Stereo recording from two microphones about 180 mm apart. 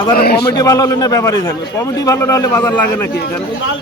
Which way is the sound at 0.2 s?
60° left (ahead or behind).